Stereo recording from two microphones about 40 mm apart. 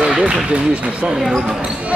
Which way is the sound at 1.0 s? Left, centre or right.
Centre.